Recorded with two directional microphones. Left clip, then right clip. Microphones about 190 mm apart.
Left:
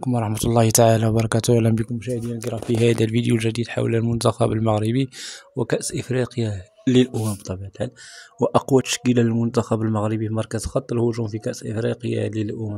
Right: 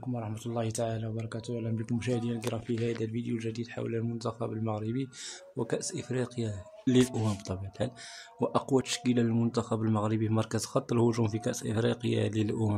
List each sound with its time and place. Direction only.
0.0 s speech: 60° left (ahead or behind)
1.9 s speech: 15° left (ahead or behind)
2.8 s speech: 60° left (ahead or behind)
5.6 s speech: 45° left (ahead or behind)
7.2 s speech: 25° left (ahead or behind)
9.8 s speech: 20° left (ahead or behind)